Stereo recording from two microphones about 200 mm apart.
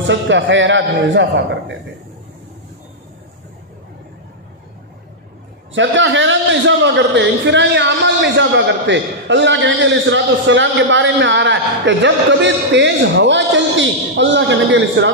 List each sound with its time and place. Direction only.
0.0 s a man's voice: 65° right (ahead or behind)
5.7 s a man's voice: 70° right (ahead or behind)